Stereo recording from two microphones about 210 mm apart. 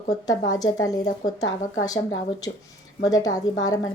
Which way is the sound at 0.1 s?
15° left (ahead or behind).